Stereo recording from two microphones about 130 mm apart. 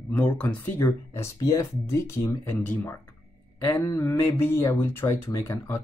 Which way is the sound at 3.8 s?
25° left (ahead or behind).